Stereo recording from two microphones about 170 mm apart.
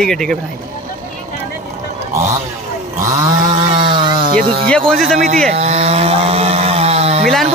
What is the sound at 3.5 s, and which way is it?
Chainsaw, 30° right (ahead or behind).